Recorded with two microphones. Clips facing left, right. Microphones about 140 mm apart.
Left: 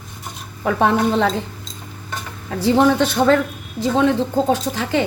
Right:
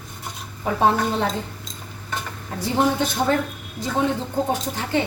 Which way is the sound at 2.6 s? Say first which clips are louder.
Left 6 dB; 90° left.